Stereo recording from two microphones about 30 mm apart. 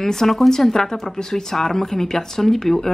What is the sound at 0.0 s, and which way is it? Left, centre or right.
A woman's voice, centre.